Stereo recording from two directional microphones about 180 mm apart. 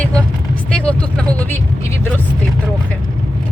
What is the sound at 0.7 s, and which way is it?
A woman's voice, 5° left (ahead or behind).